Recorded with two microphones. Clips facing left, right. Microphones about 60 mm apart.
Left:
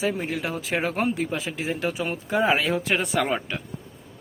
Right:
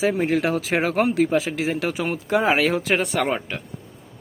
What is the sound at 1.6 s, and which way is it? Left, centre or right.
Speech, right.